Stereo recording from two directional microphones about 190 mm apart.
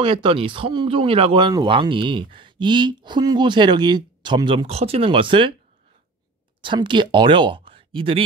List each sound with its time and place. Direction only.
0.0 s speech: 25° right (ahead or behind)
6.6 s speech: 25° right (ahead or behind)